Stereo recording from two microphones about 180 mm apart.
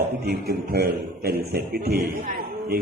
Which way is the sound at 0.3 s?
60° right (ahead or behind).